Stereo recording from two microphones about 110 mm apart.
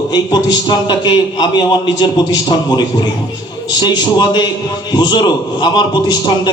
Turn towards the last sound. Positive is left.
turn(degrees=45)  # may be behind; listen again after turning